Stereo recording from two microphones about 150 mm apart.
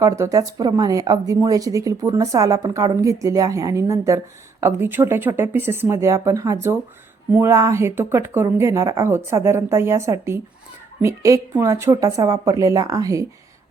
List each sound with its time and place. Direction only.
0.0 s a woman's voice: 20° right (ahead or behind)